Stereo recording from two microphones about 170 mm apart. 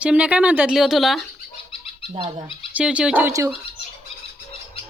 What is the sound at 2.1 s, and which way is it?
Speech, 30° right (ahead or behind).